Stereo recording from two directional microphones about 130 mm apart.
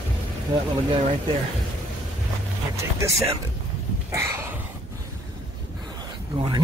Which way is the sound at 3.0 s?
20° right (ahead or behind).